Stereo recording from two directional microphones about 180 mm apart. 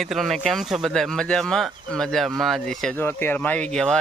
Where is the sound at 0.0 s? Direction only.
Centre (ahead or behind).